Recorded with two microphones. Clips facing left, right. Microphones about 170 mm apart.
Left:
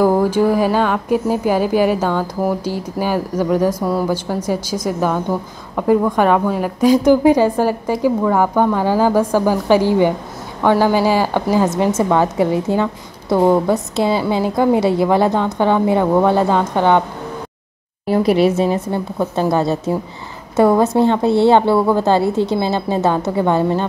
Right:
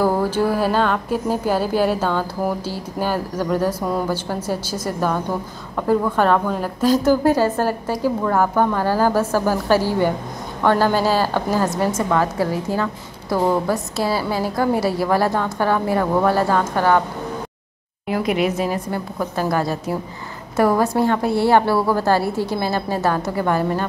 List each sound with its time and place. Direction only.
0.0 s a woman's voice: 15° left (ahead or behind)
18.0 s a woman's voice: 35° left (ahead or behind)